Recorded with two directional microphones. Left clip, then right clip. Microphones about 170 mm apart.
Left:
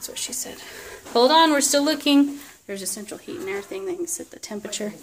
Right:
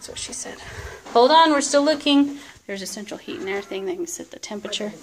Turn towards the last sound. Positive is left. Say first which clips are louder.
# right 2 dB
turn(degrees=15)  # may be behind; listen again after turning